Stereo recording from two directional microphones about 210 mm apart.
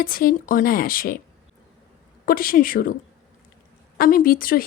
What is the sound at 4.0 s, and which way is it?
Speech, 40° left (ahead or behind).